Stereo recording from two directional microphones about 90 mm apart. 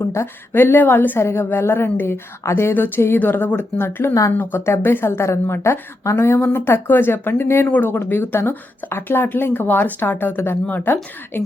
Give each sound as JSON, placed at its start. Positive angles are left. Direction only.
{"t": 0.0, "sound": "a woman's voice", "side_deg": 30}